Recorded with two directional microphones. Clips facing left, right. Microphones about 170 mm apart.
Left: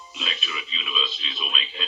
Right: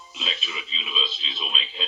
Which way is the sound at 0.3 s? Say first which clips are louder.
Right 1 dB; 25° right (ahead or behind).